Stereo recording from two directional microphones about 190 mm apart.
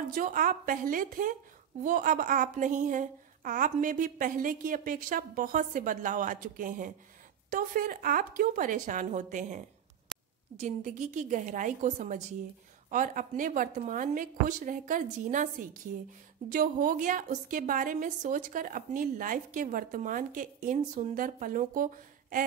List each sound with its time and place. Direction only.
0.1 s a woman's voice: 45° right (ahead or behind)
10.1 s a sound: centre (ahead or behind)
10.6 s a woman's voice: 40° right (ahead or behind)